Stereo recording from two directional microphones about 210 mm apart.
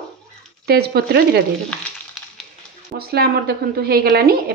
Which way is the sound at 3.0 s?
50° right (ahead or behind).